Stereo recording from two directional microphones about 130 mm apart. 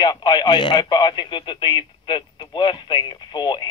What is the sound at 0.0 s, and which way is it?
Speech, 35° left (ahead or behind).